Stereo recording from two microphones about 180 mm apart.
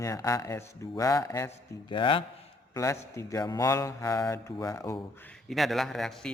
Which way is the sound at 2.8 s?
15° left (ahead or behind).